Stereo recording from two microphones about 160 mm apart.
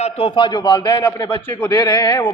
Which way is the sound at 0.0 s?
35° left (ahead or behind).